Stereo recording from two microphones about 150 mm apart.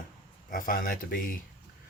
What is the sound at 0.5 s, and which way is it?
Speech, 70° left (ahead or behind).